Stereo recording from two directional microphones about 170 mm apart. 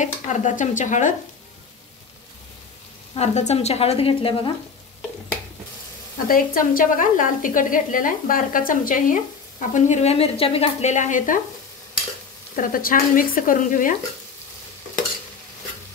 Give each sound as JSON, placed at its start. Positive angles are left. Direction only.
{"t": 0.0, "sound": "speech", "side_deg": 45}
{"t": 3.2, "sound": "a woman's voice", "side_deg": 40}
{"t": 6.2, "sound": "speech", "side_deg": 55}
{"t": 12.5, "sound": "speech", "side_deg": 55}